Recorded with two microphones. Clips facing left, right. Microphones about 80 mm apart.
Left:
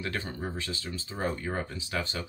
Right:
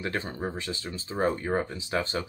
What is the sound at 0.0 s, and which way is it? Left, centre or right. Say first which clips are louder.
Speech: right 3 dB; right.